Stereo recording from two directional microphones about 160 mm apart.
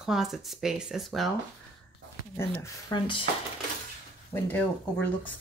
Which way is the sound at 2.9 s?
30° left (ahead or behind).